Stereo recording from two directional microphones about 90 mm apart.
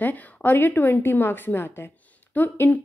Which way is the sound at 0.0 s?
20° left (ahead or behind).